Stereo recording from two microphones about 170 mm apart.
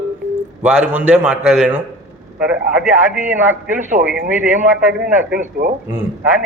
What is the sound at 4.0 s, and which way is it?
Speech, 40° right (ahead or behind).